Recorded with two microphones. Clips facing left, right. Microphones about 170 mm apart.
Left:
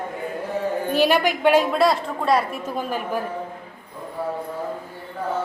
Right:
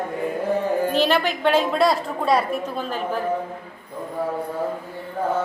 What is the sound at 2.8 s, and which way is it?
Speech, 10° left (ahead or behind).